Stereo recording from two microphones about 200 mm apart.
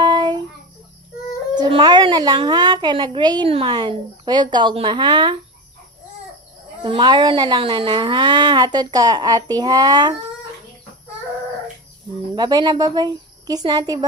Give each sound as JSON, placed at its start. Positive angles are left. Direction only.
{"t": 0.0, "sound": "child singing", "side_deg": -20}
{"t": 1.5, "sound": "a child's voice", "side_deg": -20}
{"t": 6.8, "sound": "a child's voice", "side_deg": -25}
{"t": 12.3, "sound": "a child's voice", "side_deg": -20}